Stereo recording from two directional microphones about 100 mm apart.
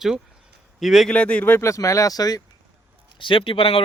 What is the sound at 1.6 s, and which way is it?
Speech, 30° left (ahead or behind).